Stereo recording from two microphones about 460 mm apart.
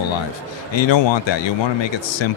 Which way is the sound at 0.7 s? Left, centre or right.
Left.